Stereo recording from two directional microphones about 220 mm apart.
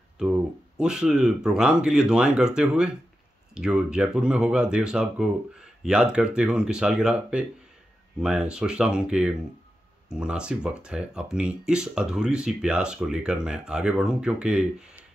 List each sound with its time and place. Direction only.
0.2 s speech: 5° right (ahead or behind)